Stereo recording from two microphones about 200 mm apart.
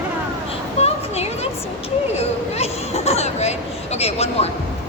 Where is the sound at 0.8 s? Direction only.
30° left (ahead or behind).